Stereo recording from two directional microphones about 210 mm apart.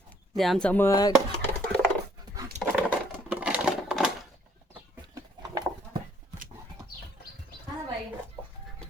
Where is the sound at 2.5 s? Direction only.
35° right (ahead or behind).